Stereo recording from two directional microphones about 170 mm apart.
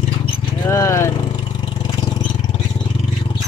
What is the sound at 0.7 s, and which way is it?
Speech, 15° left (ahead or behind).